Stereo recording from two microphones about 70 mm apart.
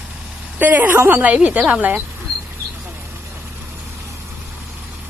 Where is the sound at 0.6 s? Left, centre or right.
Right.